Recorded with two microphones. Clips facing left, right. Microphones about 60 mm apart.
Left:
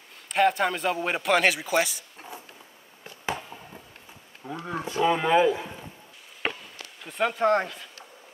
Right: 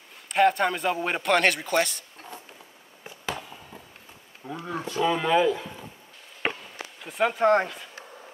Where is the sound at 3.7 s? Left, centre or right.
Centre.